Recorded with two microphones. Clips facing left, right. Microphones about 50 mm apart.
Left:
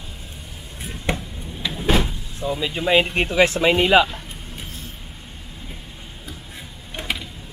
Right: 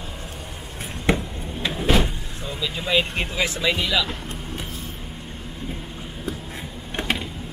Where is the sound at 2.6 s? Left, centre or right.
Left.